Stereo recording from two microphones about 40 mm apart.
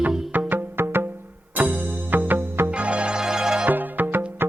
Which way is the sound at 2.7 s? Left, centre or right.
Right.